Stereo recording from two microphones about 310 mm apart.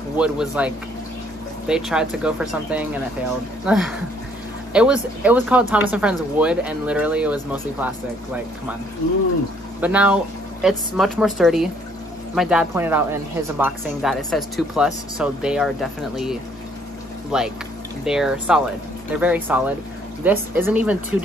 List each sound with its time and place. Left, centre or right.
0.2 s speech: centre
9.8 s speech: centre